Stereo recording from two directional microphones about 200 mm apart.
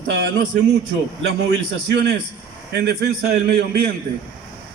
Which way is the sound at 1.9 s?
60° right (ahead or behind).